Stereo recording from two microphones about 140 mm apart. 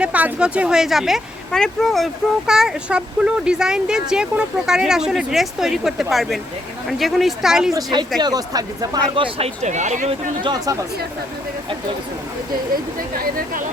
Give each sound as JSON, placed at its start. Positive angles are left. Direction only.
{"t": 0.0, "sound": "speech", "side_deg": -10}
{"t": 7.7, "sound": "speech", "side_deg": -25}
{"t": 9.6, "sound": "speech", "side_deg": -60}
{"t": 10.4, "sound": "speech", "side_deg": -30}